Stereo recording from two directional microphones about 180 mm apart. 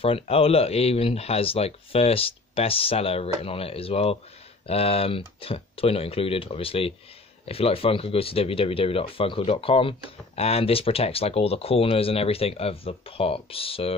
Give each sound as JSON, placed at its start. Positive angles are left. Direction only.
{"t": 0.0, "sound": "speech", "side_deg": 30}